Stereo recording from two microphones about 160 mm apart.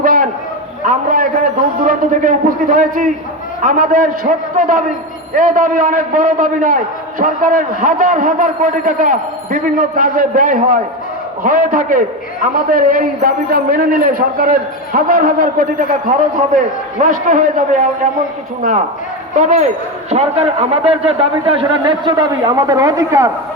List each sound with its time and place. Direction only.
0.0 s a sound: 60° right (ahead or behind)
3.6 s a man's voice: 60° right (ahead or behind)
19.3 s a man's voice: 50° right (ahead or behind); by 23.3 s 20° right (ahead or behind)